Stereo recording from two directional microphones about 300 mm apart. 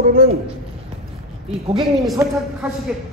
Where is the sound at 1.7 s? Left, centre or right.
Centre.